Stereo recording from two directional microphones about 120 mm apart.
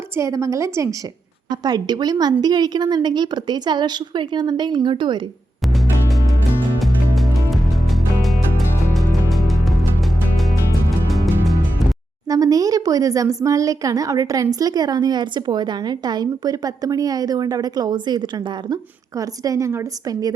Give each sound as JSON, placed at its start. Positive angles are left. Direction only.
{"t": 0.2, "sound": "a woman's voice", "side_deg": -25}
{"t": 6.7, "sound": "music", "side_deg": 0}
{"t": 12.3, "sound": "a woman's voice", "side_deg": -30}